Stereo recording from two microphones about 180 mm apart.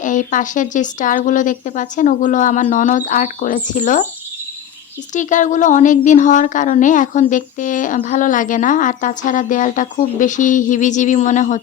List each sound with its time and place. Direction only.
0.0 s a woman's voice: 45° left (ahead or behind)
5.1 s a woman's voice: 45° left (ahead or behind)